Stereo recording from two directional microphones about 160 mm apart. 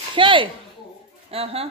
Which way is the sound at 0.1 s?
30° right (ahead or behind).